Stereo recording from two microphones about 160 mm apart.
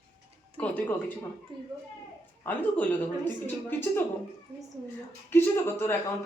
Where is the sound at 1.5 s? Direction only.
30° right (ahead or behind).